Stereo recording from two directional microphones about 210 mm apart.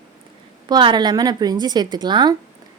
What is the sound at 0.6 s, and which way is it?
A woman's voice, 20° right (ahead or behind).